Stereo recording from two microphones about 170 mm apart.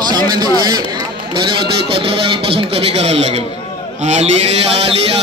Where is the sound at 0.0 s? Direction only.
25° right (ahead or behind).